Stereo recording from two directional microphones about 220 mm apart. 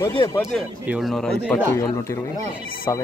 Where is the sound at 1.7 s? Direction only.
15° left (ahead or behind).